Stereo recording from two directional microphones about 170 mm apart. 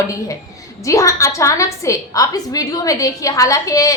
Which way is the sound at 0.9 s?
20° left (ahead or behind).